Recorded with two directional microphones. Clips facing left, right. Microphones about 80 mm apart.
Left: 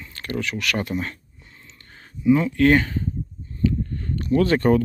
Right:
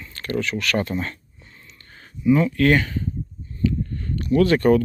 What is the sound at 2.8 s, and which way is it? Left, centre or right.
Speech, left.